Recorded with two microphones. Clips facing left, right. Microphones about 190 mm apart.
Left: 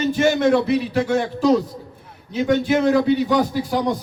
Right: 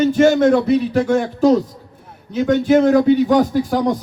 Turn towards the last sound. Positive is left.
turn(degrees=-45)  # may be behind; listen again after turning